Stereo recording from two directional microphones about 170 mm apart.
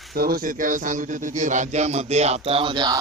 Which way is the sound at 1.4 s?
45° right (ahead or behind).